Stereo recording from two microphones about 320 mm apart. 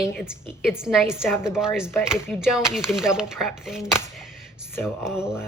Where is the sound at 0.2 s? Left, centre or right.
Centre.